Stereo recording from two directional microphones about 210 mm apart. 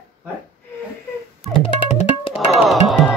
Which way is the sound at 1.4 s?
Centre (ahead or behind).